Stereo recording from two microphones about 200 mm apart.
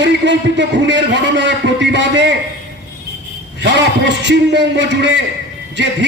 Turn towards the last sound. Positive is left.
turn(degrees=-60)  # may be behind; listen again after turning